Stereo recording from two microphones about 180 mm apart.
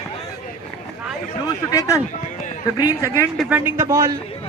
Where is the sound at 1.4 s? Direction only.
20° left (ahead or behind).